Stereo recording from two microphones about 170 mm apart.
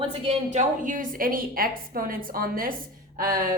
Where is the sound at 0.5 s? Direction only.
50° right (ahead or behind).